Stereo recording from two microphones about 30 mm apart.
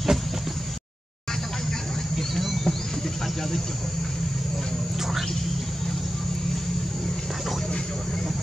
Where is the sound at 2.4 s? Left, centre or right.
Centre.